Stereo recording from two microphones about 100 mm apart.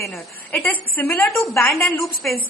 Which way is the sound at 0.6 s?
20° left (ahead or behind).